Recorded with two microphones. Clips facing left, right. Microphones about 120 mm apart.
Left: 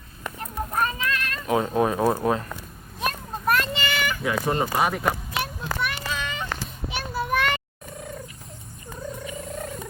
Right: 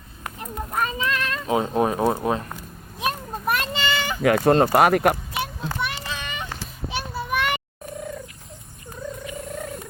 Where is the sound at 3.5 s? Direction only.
25° right (ahead or behind).